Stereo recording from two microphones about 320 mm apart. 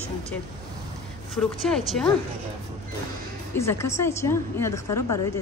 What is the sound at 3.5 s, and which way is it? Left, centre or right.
Speech, centre.